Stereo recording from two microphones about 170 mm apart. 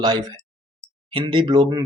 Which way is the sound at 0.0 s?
25° right (ahead or behind).